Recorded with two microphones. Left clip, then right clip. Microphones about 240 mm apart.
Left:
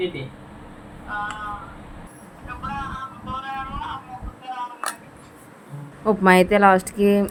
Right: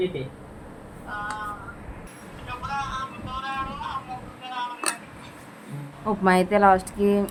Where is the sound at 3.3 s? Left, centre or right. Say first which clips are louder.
Left 2 dB; left.